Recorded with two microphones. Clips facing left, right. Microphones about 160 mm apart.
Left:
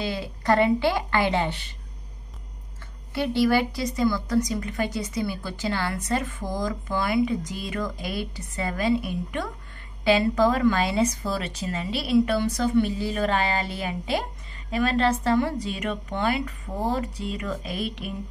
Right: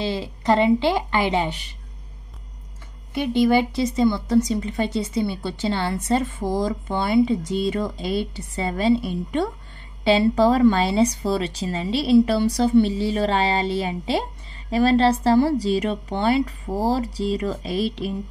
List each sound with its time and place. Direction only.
0.0 s speech: 25° right (ahead or behind)
3.2 s speech: 20° right (ahead or behind)